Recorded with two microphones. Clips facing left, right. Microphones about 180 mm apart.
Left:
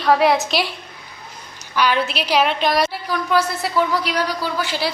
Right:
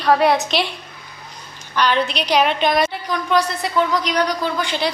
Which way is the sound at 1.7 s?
10° left (ahead or behind).